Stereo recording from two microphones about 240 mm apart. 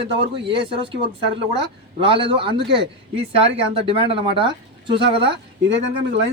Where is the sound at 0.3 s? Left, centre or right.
Right.